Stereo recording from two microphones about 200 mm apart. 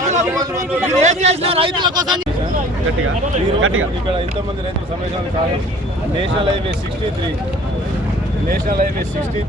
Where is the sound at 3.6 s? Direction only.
90° right.